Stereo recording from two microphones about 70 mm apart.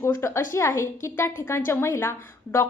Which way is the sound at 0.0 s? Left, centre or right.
Left.